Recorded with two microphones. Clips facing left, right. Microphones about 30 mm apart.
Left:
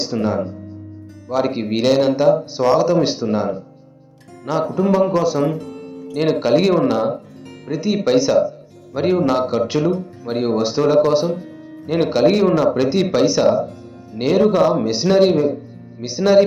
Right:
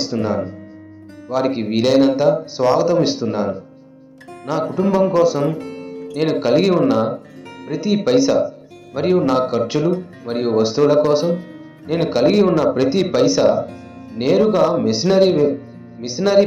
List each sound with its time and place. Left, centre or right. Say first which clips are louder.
0.0 s speech: even; centre
5.5 s music: right 2 dB; right
6.1 s speech: even; centre